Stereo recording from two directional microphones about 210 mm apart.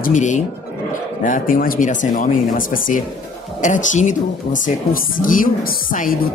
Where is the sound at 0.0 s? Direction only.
35° left (ahead or behind).